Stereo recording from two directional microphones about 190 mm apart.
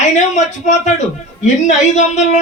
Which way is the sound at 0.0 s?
40° left (ahead or behind).